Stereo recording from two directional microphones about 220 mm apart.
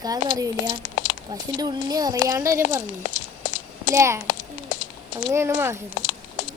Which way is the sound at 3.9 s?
10° right (ahead or behind).